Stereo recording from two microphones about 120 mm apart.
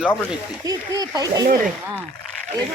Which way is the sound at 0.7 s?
30° right (ahead or behind).